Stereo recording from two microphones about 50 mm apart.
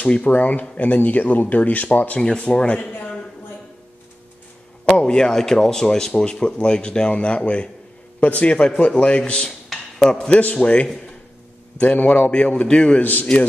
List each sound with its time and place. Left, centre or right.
0.0 s speech: left
2.1 s a man's voice: left
4.8 s a man's voice: centre
12.1 s a man's voice: left
13.0 s speech: left